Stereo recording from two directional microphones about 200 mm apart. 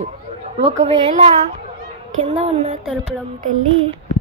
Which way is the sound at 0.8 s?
30° right (ahead or behind).